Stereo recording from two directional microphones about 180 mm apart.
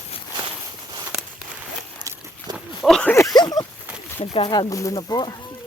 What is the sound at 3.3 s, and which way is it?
Speech, 25° left (ahead or behind).